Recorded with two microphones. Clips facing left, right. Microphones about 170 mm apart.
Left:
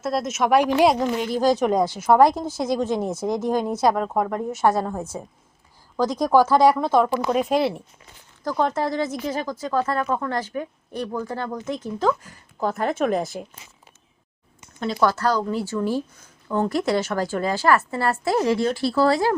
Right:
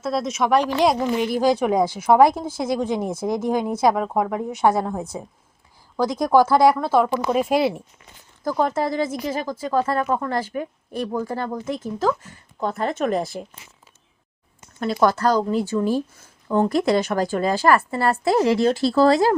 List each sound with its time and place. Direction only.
0.0 s speech: centre (ahead or behind)
0.6 s a woman's voice: 10° left (ahead or behind)
1.2 s speech: 10° right (ahead or behind)
14.9 s speech: 15° right (ahead or behind)